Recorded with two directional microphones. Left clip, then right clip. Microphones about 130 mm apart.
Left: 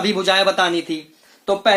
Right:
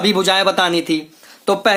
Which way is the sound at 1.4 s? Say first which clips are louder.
Right 1 dB; 55° right (ahead or behind).